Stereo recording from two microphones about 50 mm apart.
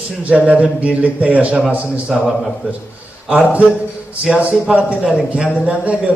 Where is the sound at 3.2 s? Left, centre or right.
Right.